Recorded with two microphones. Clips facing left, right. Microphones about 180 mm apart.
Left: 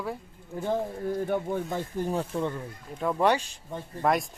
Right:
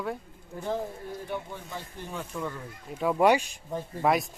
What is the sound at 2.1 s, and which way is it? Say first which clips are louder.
Speech: left 3 dB; 30° left (ahead or behind).